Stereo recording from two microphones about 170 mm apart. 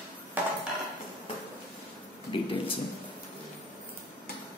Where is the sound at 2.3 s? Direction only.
30° left (ahead or behind).